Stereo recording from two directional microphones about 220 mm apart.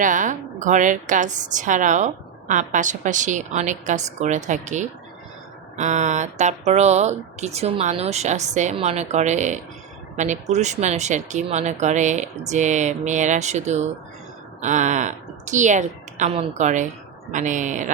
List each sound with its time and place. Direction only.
0.0 s a woman's voice: 35° right (ahead or behind)